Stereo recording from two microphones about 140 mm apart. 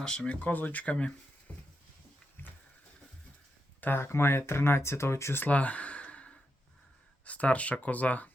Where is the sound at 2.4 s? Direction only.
15° left (ahead or behind).